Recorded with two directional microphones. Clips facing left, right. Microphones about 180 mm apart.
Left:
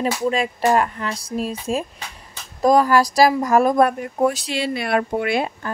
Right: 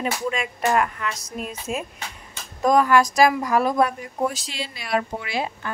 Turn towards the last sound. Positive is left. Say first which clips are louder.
# left 7 dB
turn(degrees=60)  # may be behind; listen again after turning